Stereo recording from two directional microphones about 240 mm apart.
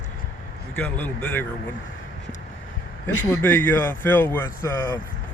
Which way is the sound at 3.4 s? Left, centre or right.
Centre.